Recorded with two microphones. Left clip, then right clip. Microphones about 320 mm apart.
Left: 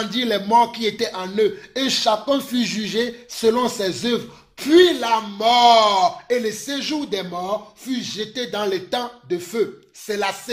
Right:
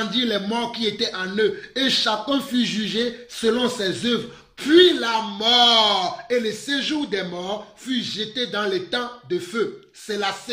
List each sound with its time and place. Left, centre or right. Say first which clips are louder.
0.1 s a man's voice: left 6 dB; centre